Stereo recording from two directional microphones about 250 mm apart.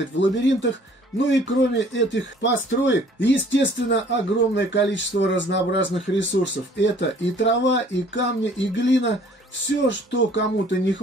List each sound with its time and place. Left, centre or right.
0.2 s speech: left